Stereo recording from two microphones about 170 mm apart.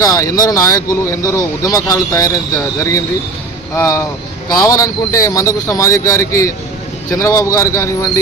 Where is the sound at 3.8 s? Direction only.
15° left (ahead or behind).